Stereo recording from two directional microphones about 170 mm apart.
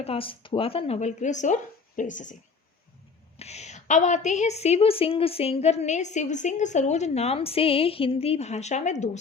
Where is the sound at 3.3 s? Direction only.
40° left (ahead or behind).